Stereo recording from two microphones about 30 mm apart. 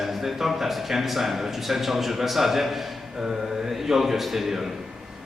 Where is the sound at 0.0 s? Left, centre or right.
Centre.